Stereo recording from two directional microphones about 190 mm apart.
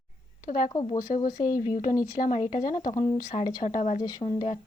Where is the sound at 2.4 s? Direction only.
30° left (ahead or behind).